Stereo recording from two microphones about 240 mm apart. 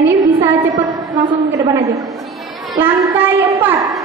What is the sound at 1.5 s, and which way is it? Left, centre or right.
A woman's voice, centre.